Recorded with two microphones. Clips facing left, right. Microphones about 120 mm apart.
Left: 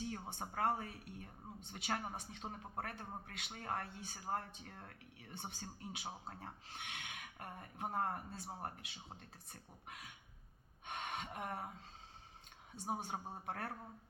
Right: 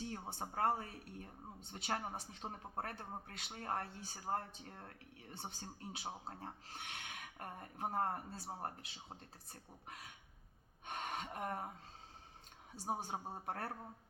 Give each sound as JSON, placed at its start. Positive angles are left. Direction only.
{"t": 0.0, "sound": "speech", "side_deg": -35}
{"t": 12.7, "sound": "speech", "side_deg": -35}